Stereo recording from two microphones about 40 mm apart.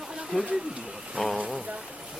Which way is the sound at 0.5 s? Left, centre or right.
Right.